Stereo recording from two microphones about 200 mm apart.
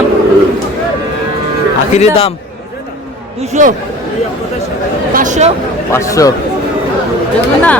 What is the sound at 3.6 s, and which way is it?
Speech, 40° right (ahead or behind).